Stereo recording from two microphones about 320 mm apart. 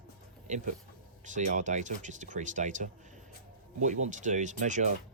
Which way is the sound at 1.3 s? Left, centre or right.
Right.